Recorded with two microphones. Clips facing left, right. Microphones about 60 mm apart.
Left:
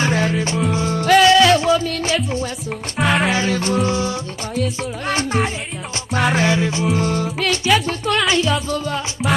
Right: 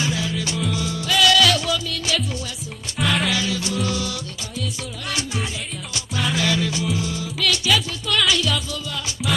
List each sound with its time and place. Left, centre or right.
0.0 s music: left
1.3 s music: left
6.9 s music: left
7.3 s music: left